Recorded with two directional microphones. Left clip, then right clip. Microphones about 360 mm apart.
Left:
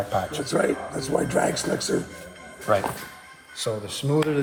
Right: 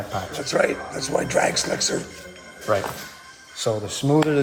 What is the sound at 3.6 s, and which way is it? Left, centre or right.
Speech, right.